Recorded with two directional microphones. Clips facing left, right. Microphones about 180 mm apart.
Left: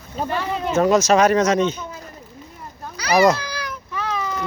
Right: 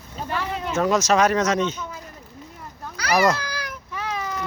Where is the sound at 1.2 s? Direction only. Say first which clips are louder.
Left 4 dB; centre (ahead or behind).